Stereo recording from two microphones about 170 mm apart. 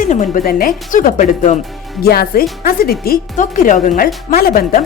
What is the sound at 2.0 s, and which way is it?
Speech, 65° left (ahead or behind).